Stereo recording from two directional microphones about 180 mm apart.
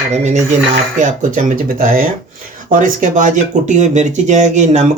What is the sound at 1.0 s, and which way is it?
Speech, 45° right (ahead or behind).